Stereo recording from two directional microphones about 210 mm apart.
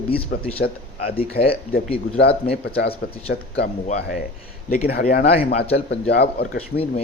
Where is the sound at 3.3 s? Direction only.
45° left (ahead or behind).